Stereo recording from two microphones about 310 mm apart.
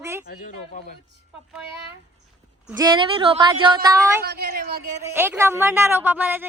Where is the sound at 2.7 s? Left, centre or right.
Centre.